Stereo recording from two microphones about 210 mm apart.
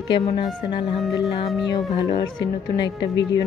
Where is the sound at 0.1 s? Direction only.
25° left (ahead or behind).